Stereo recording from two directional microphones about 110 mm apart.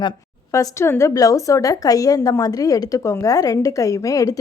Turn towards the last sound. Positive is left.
turn(degrees=30)  # may be behind; listen again after turning